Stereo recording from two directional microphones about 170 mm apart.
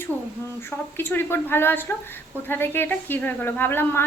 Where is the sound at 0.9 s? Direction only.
15° left (ahead or behind).